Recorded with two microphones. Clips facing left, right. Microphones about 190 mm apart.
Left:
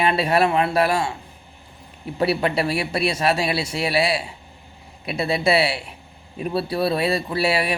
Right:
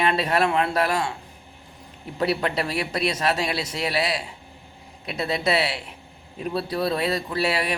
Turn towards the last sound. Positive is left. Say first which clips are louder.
# left 3 dB
turn(degrees=10)  # may be behind; listen again after turning